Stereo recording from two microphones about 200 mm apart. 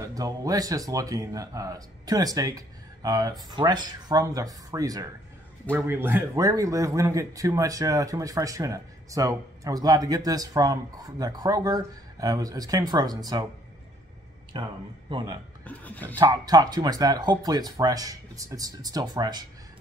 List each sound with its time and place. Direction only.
0.0 s speech: 15° right (ahead or behind)
14.5 s speech: 25° right (ahead or behind)
15.6 s speech: 5° left (ahead or behind)
16.2 s speech: 20° right (ahead or behind)